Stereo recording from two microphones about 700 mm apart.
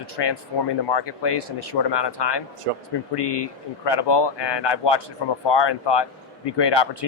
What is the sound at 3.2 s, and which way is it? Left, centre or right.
Speech, left.